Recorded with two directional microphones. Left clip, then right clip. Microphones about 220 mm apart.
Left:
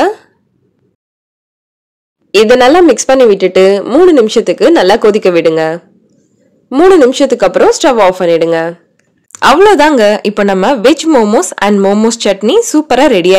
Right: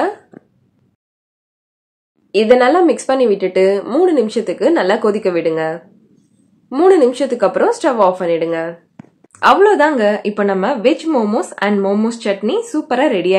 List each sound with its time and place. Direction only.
2.3 s speech: 40° left (ahead or behind)